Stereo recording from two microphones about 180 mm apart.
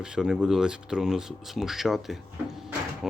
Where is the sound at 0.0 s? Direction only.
5° right (ahead or behind).